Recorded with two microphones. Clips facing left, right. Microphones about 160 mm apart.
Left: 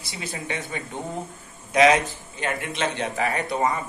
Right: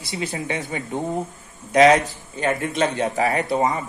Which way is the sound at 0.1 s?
20° right (ahead or behind).